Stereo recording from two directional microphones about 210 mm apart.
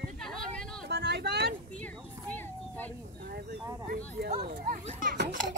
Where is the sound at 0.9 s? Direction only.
50° right (ahead or behind).